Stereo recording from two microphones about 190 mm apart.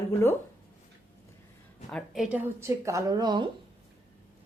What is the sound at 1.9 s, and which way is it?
Speech, centre (ahead or behind).